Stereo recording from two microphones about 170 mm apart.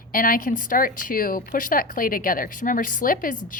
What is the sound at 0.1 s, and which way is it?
Speech, 55° left (ahead or behind).